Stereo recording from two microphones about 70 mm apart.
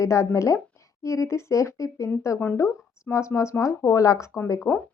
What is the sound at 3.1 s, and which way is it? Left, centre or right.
A woman's voice, left.